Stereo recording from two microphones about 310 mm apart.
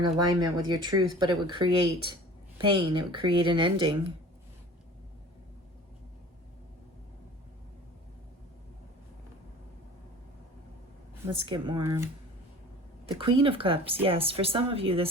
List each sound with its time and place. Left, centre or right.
0.3 s speech: centre
11.3 s speech: centre
13.1 s speech: centre